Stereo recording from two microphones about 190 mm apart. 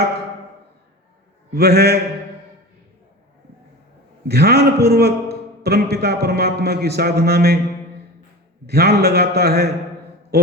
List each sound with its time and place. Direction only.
1.5 s a man's voice: 55° right (ahead or behind)
4.3 s a man's voice: 55° right (ahead or behind)
8.6 s a man's voice: 55° right (ahead or behind)
10.3 s a sound: 55° right (ahead or behind)